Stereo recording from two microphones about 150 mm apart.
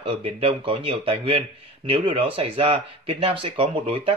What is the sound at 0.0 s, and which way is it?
Speech, 40° right (ahead or behind).